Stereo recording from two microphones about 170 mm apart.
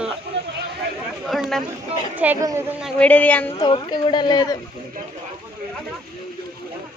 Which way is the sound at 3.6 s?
30° left (ahead or behind).